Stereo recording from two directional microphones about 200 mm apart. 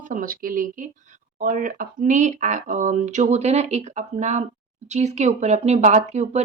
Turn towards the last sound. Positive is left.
turn(degrees=-35)  # may be behind; listen again after turning